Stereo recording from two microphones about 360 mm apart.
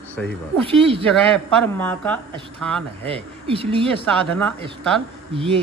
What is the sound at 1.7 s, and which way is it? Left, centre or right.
Speech, centre.